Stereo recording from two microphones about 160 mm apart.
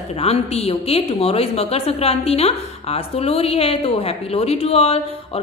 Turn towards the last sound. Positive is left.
turn(degrees=40)  # may be behind; listen again after turning